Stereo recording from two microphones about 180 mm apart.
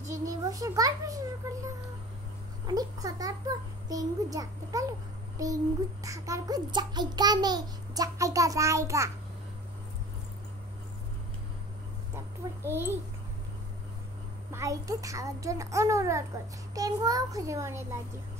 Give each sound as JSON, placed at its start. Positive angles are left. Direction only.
{"t": 0.1, "sound": "a child's voice", "side_deg": -20}
{"t": 2.6, "sound": "a child's voice", "side_deg": -20}
{"t": 12.6, "sound": "a child's voice", "side_deg": -15}
{"t": 14.5, "sound": "a child's voice", "side_deg": -15}